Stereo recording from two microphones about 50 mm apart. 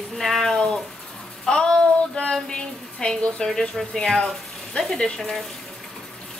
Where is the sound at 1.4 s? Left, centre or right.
Centre.